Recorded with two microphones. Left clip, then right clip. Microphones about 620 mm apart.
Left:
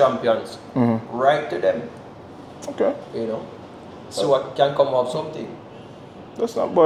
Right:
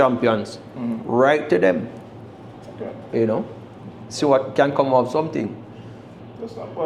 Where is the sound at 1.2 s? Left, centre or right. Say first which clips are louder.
Right 2 dB; right.